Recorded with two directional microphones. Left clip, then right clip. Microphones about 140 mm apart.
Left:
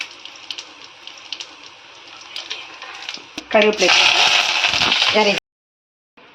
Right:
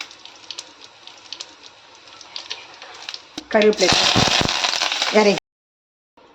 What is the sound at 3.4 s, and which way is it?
Speech, 15° right (ahead or behind).